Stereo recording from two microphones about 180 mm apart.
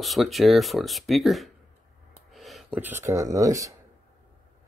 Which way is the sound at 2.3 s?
Centre (ahead or behind).